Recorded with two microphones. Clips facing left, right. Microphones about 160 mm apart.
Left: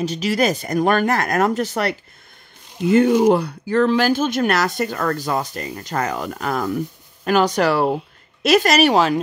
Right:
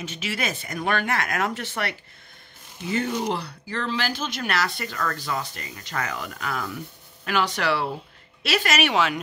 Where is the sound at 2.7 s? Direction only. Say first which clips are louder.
Left 12 dB; 55° left (ahead or behind).